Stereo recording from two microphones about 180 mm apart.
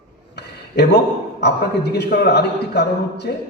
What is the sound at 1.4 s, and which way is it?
A man's voice, 65° left (ahead or behind).